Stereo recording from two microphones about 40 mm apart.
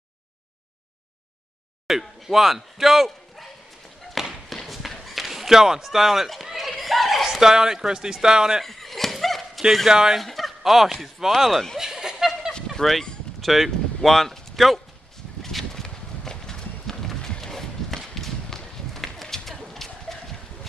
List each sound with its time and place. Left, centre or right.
1.9 s speech: centre
4.2 s a sound: centre
7.2 s speech: centre
8.6 s a sound: centre
9.8 s speech: centre
10.1 s fowl: centre
10.6 s speech: centre
11.8 s snicker: centre
13.4 s speech: centre
15.5 s a sound: centre
17.4 s walk: centre
19.2 s a sound: centre